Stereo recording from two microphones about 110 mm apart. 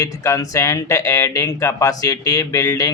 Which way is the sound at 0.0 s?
30° left (ahead or behind).